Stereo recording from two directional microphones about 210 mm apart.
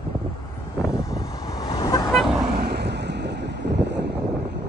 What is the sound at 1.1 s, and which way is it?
Vehicle, 15° left (ahead or behind).